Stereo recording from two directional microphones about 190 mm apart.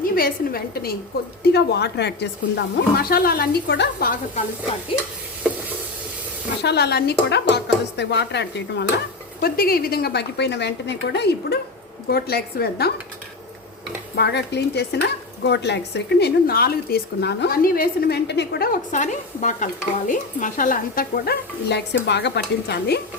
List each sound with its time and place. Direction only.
0.2 s speech: 50° left (ahead or behind)
1.5 s stir: 60° left (ahead or behind)
2.6 s speech: 55° left (ahead or behind)
6.6 s stir: 60° left (ahead or behind)
9.4 s stir: 50° left (ahead or behind)
14.2 s stir: 60° left (ahead or behind)